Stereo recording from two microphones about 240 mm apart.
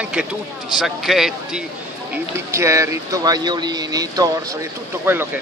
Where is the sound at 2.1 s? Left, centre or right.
Centre.